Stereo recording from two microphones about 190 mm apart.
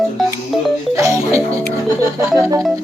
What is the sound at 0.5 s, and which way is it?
Music, centre (ahead or behind).